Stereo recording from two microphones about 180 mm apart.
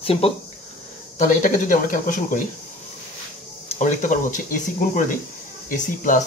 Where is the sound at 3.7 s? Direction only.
45° left (ahead or behind).